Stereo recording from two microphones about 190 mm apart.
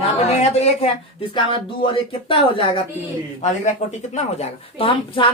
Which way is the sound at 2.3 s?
25° left (ahead or behind).